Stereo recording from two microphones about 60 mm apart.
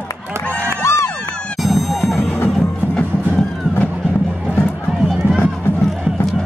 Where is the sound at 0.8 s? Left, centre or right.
Left.